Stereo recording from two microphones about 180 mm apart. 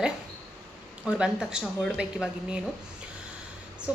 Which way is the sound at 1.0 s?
5° right (ahead or behind).